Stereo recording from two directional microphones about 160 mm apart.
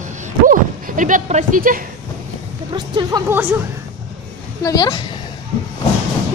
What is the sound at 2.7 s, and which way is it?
Speech, 25° right (ahead or behind).